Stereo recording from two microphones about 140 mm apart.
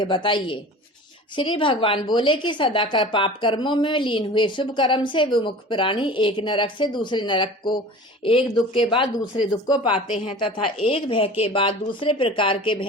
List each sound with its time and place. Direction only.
0.0 s a woman's voice: 35° left (ahead or behind)